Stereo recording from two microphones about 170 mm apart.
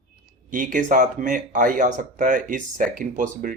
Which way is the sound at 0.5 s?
50° right (ahead or behind).